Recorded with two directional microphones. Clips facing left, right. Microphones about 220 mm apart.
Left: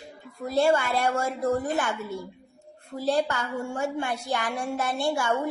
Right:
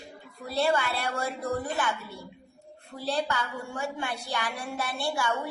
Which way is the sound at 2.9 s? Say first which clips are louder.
Left 4 dB; 45° left (ahead or behind).